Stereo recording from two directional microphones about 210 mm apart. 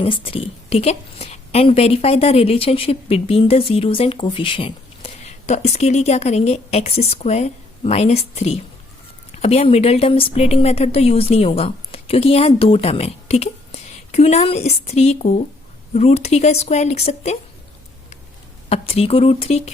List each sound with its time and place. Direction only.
0.0 s a woman's voice: 25° left (ahead or behind)
18.7 s a woman's voice: 30° left (ahead or behind)